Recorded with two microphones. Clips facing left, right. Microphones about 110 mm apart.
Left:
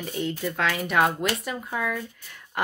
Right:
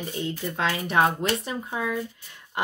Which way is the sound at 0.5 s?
25° right (ahead or behind).